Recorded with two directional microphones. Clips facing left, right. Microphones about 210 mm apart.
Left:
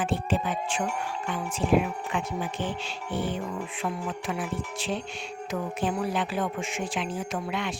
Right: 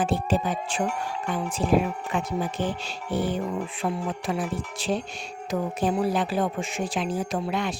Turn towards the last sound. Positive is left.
turn(degrees=-40)  # may be behind; listen again after turning